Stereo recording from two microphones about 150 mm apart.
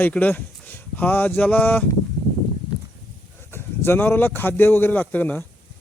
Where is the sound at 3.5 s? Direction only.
15° left (ahead or behind).